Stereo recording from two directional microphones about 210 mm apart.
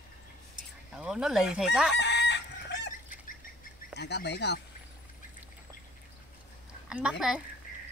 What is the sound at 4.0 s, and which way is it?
Speech, 55° left (ahead or behind).